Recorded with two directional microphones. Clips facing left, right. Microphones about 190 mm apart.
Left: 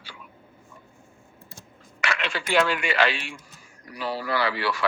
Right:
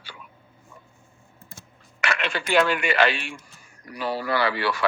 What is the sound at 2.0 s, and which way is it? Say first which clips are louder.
Speech: right 2 dB; 55° right (ahead or behind).